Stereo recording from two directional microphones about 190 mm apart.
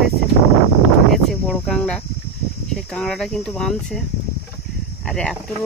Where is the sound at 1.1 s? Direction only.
Centre (ahead or behind).